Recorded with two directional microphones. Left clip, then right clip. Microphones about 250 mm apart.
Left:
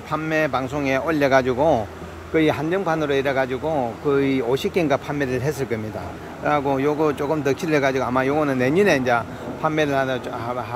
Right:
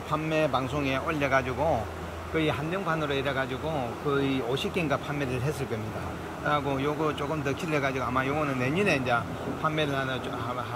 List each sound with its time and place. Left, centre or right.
0.1 s speech: centre